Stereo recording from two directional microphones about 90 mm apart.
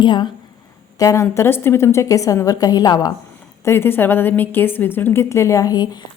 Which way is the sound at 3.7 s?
25° left (ahead or behind).